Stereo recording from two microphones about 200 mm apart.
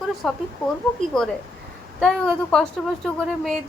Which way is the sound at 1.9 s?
5° left (ahead or behind).